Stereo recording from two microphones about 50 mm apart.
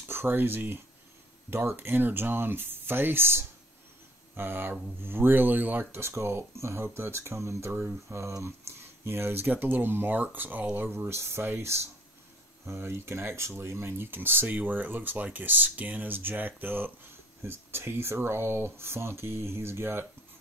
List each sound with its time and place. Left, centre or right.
0.1 s speech: right
7.7 s speech: right
11.0 s speech: right
17.4 s speech: right